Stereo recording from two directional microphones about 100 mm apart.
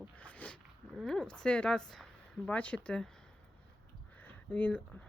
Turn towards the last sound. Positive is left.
turn(degrees=15)  # may be behind; listen again after turning